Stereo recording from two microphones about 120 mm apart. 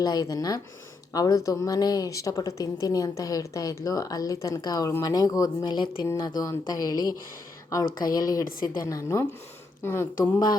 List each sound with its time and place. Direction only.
0.0 s a woman's voice: 30° left (ahead or behind)